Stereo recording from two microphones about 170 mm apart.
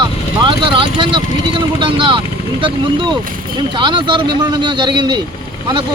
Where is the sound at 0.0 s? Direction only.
25° right (ahead or behind).